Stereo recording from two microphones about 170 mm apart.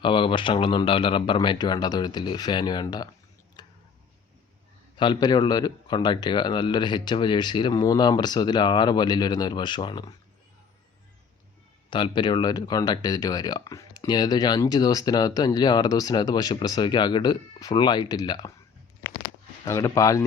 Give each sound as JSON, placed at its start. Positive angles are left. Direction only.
{"t": 0.0, "sound": "speech", "side_deg": 30}
{"t": 3.6, "sound": "tick-tock", "side_deg": 25}
{"t": 4.9, "sound": "speech", "side_deg": 25}
{"t": 11.9, "sound": "speech", "side_deg": 30}
{"t": 19.6, "sound": "speech", "side_deg": 15}